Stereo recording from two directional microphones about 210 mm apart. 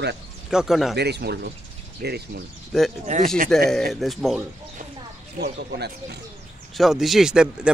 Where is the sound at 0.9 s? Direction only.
50° right (ahead or behind).